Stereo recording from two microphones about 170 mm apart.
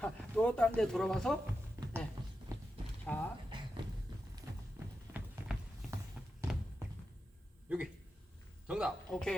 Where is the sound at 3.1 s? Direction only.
10° left (ahead or behind).